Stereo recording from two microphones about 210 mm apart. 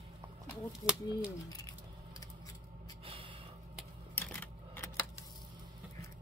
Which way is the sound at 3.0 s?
25° right (ahead or behind).